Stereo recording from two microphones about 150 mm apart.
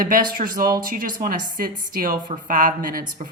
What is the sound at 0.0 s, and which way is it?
Speech, 65° right (ahead or behind).